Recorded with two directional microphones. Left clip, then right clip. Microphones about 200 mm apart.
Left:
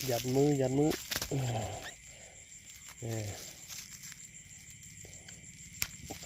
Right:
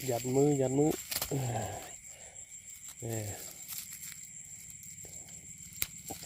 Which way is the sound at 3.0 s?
10° right (ahead or behind).